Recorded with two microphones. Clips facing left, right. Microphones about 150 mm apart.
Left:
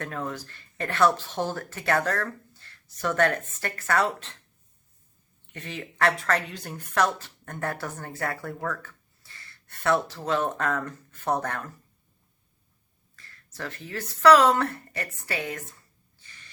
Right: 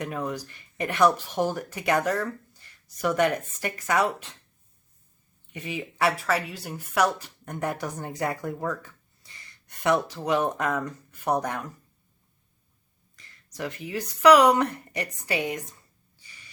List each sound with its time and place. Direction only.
0.0 s a woman's voice: 15° right (ahead or behind)
5.5 s a woman's voice: 10° right (ahead or behind)
13.1 s a woman's voice: 15° right (ahead or behind)
16.1 s a sound: 10° right (ahead or behind)